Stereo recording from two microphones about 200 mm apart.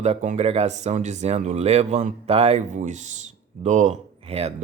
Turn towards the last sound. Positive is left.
turn(degrees=-30)  # may be behind; listen again after turning